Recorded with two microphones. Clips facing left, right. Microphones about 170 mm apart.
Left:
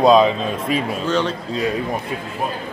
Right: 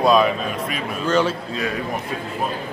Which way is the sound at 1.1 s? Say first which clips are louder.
Right 2 dB; 5° right (ahead or behind).